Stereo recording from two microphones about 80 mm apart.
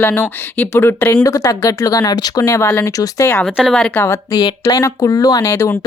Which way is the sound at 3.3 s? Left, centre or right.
Centre.